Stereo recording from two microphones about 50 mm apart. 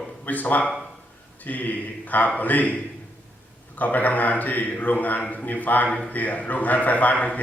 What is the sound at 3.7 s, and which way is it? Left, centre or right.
A man's voice, left.